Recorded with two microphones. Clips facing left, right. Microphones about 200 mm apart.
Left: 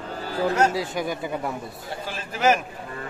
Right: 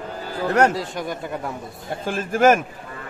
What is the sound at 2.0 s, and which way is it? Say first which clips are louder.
Speech: right 6 dB; 50° right (ahead or behind).